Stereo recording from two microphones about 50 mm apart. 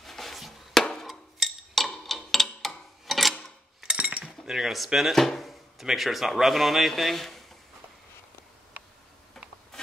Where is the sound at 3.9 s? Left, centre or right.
Right.